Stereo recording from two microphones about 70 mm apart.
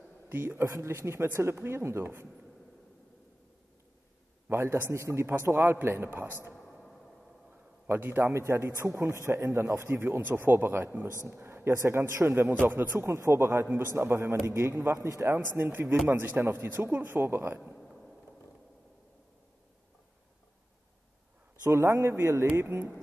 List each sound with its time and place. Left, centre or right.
0.3 s speech: right
4.5 s speech: right
6.5 s a sound: centre
7.9 s speech: right
15.0 s speech: right
15.3 s speech: right
21.6 s speech: right
22.6 s speech: right